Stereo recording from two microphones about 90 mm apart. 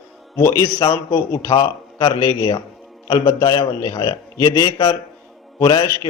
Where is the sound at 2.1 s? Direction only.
35° left (ahead or behind).